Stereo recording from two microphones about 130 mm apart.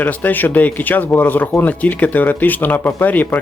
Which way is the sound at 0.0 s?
10° left (ahead or behind).